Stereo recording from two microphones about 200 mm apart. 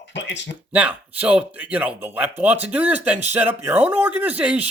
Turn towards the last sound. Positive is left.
turn(degrees=-5)  # may be behind; listen again after turning